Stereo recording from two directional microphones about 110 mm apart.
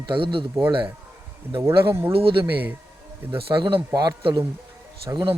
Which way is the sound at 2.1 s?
55° right (ahead or behind).